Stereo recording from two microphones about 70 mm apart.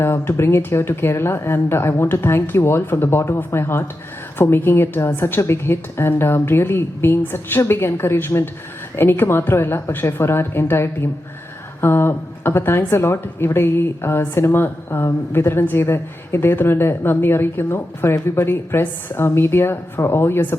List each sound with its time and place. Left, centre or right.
0.0 s a woman's voice: left